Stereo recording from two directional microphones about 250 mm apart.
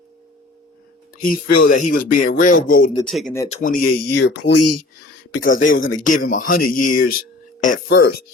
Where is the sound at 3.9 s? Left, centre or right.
Left.